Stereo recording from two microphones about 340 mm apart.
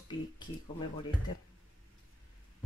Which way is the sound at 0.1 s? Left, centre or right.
Left.